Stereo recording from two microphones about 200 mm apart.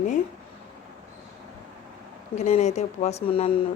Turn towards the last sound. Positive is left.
turn(degrees=30)  # may be behind; listen again after turning